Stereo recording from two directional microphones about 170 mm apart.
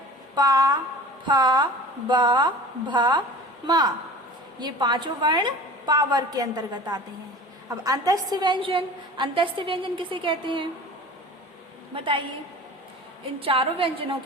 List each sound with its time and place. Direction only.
0.3 s a woman's voice: 20° right (ahead or behind)
11.9 s a woman's voice: 30° right (ahead or behind)
13.4 s a woman's voice: 30° right (ahead or behind)